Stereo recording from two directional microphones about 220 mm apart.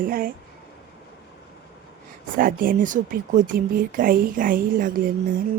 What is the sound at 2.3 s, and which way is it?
Speech, 40° right (ahead or behind).